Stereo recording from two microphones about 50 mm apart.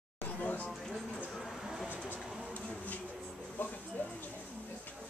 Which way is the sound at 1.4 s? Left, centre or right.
Centre.